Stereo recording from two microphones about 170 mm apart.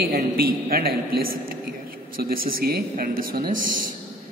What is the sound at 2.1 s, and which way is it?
A woman's voice, 60° right (ahead or behind).